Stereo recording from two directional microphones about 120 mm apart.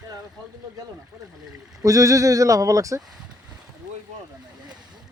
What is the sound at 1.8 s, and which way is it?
Speech, 25° right (ahead or behind).